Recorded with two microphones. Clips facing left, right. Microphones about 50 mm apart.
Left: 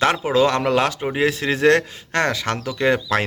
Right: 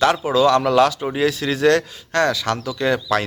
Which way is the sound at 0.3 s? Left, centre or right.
Left.